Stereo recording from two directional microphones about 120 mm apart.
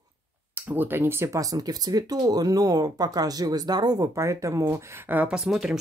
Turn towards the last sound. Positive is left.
turn(degrees=-5)  # may be behind; listen again after turning